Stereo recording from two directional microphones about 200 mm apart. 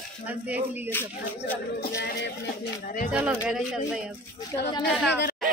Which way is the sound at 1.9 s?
60° left (ahead or behind).